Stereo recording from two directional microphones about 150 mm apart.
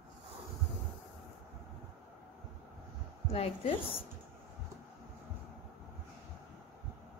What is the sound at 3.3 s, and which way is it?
Speech, 40° left (ahead or behind).